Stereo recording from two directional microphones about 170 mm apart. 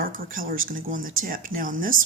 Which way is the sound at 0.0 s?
55° right (ahead or behind).